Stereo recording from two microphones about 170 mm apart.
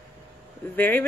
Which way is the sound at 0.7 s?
10° left (ahead or behind).